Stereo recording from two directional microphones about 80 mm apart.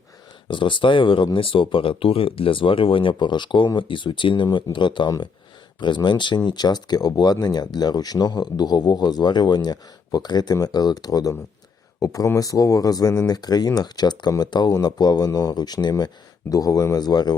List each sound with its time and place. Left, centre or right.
0.4 s speech: left
3.8 s speech: left